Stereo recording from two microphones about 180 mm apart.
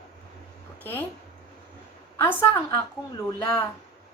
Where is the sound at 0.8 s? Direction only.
10° left (ahead or behind).